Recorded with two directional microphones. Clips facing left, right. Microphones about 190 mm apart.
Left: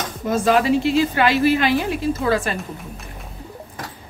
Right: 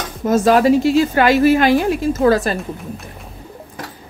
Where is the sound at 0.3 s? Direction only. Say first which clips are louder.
Right 5 dB; 40° right (ahead or behind).